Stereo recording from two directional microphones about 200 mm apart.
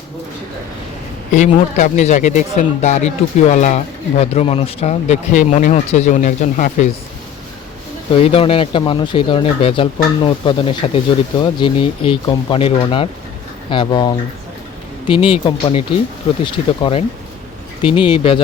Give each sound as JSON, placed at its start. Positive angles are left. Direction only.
{"t": 1.3, "sound": "speech", "side_deg": 40}
{"t": 8.1, "sound": "speech", "side_deg": 30}
{"t": 18.0, "sound": "speech", "side_deg": 25}